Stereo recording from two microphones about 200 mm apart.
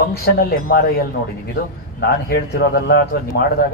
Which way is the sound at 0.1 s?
50° left (ahead or behind).